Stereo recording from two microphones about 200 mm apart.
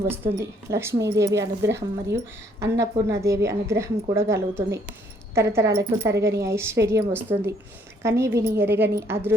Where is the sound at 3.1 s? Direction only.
15° right (ahead or behind).